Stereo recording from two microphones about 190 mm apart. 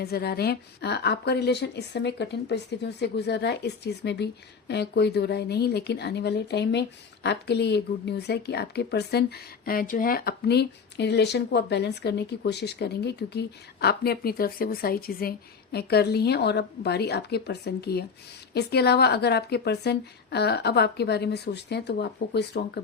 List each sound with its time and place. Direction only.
0.0 s speech: 55° left (ahead or behind)